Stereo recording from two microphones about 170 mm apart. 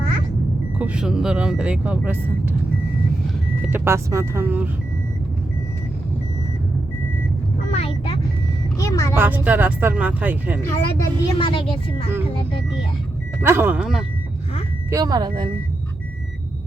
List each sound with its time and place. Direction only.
0.8 s speech: 5° right (ahead or behind)
3.7 s speech: 15° right (ahead or behind)
7.7 s vehicle: 35° left (ahead or behind)
8.8 s speech: 20° left (ahead or behind)
9.1 s speech: 10° right (ahead or behind)
10.6 s speech: 15° left (ahead or behind)
11.3 s speech: 30° left (ahead or behind)
13.4 s speech: 15° right (ahead or behind)
14.8 s speech: 20° right (ahead or behind)